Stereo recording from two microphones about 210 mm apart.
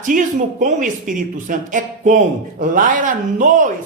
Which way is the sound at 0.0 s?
40° right (ahead or behind).